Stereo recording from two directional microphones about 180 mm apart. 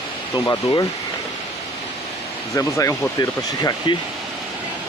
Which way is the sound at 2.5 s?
15° left (ahead or behind).